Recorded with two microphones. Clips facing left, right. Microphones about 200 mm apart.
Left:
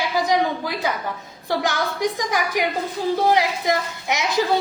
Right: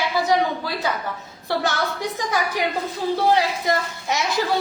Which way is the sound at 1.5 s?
15° left (ahead or behind).